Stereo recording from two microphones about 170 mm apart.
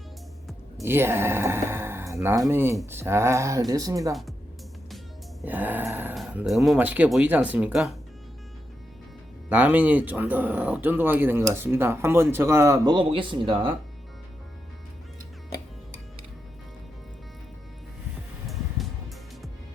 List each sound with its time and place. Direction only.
0.8 s speech: 15° right (ahead or behind)
4.1 s a woman's voice: centre (ahead or behind)
5.5 s speech: 10° right (ahead or behind)
9.5 s speech: 10° right (ahead or behind); by 13.7 s 30° right (ahead or behind)